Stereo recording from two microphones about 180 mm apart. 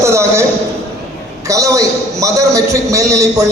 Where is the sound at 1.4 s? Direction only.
20° right (ahead or behind).